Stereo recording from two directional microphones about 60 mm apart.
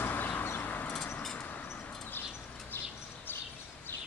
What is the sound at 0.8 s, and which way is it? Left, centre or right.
Vehicle, centre.